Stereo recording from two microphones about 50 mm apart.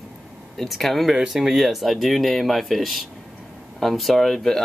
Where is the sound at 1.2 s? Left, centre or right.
Centre.